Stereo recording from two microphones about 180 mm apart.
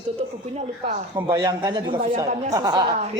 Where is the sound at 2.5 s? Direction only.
20° right (ahead or behind).